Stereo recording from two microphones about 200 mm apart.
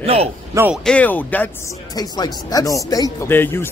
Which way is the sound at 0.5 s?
10° right (ahead or behind).